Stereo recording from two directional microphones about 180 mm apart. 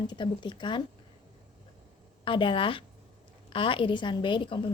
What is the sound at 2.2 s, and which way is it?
A woman's voice, 30° left (ahead or behind).